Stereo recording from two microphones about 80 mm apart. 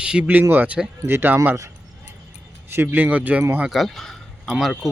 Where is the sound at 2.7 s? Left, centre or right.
Right.